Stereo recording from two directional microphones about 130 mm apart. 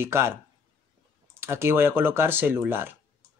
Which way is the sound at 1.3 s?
20° right (ahead or behind).